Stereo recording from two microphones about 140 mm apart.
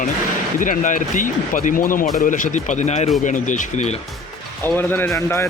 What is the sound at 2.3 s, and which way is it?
Speech, 65° left (ahead or behind).